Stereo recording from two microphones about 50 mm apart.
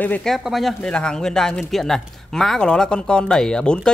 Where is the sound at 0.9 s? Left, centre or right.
Centre.